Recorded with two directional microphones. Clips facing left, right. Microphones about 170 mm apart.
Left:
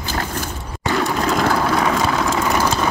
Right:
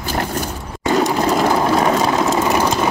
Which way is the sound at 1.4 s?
25° right (ahead or behind).